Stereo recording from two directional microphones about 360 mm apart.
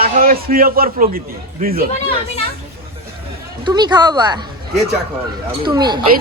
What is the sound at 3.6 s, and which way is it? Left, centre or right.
Speech, centre.